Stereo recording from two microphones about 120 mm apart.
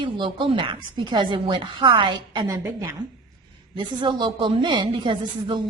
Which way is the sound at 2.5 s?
25° right (ahead or behind).